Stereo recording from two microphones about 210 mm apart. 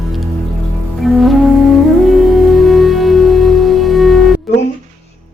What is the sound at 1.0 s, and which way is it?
Music, centre (ahead or behind).